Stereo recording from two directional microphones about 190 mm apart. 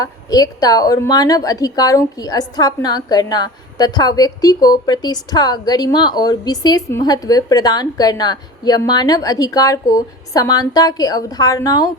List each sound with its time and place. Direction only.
0.0 s a woman's voice: 20° left (ahead or behind)